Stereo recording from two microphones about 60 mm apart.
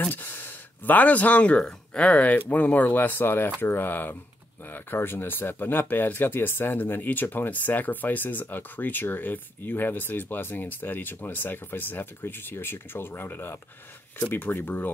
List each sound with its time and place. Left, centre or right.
0.0 s speech: left